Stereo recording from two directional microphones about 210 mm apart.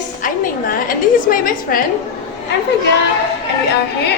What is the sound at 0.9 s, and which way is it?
Speech, 40° left (ahead or behind).